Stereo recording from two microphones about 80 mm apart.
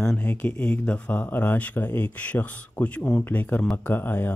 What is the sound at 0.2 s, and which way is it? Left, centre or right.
Speech, centre.